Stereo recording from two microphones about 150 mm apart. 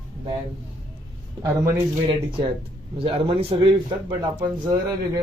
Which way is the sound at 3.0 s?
40° right (ahead or behind).